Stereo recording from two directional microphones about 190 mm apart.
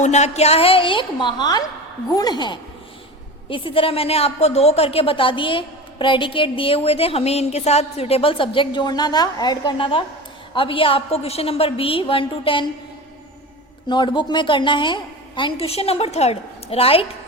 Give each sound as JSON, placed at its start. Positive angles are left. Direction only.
{"t": 0.0, "sound": "a woman's voice", "side_deg": 35}
{"t": 13.8, "sound": "a woman's voice", "side_deg": 25}